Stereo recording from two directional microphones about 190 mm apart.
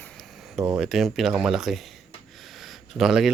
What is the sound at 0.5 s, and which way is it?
Speech, 5° right (ahead or behind).